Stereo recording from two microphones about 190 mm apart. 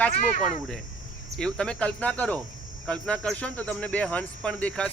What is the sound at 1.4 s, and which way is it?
Speech, 5° left (ahead or behind).